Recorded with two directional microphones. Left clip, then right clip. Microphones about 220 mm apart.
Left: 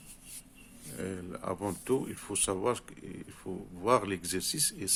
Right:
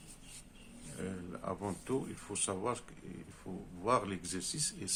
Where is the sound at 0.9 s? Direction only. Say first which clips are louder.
Left 5 dB; 45° left (ahead or behind).